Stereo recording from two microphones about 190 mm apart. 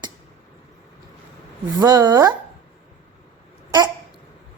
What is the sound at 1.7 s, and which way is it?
Speech, 20° right (ahead or behind).